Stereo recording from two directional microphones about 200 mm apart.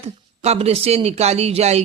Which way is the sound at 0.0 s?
30° right (ahead or behind).